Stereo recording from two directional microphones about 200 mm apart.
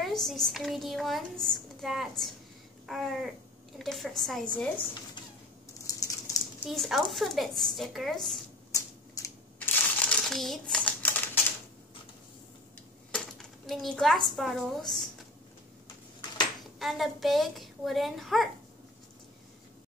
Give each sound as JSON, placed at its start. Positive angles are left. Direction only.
{"t": 0.0, "sound": "a woman's voice", "side_deg": 0}
{"t": 5.9, "sound": "crumpling", "side_deg": 15}
{"t": 6.6, "sound": "a woman's voice", "side_deg": 0}
{"t": 8.7, "sound": "finger snapping", "side_deg": 15}
{"t": 9.9, "sound": "crumpling", "side_deg": 5}
{"t": 13.1, "sound": "coin", "side_deg": 0}
{"t": 14.2, "sound": "a woman's voice", "side_deg": 0}
{"t": 16.7, "sound": "a woman's voice", "side_deg": 0}